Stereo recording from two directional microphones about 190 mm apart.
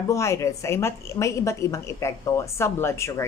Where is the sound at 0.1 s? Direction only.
15° left (ahead or behind).